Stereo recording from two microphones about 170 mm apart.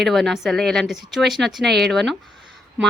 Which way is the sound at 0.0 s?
Centre (ahead or behind).